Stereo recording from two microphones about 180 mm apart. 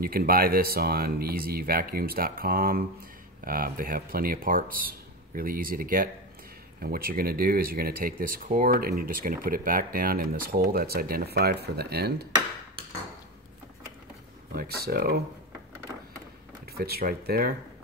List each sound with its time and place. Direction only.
0.0 s speech: 55° right (ahead or behind)
14.5 s speech: 55° right (ahead or behind)
16.7 s speech: 55° right (ahead or behind)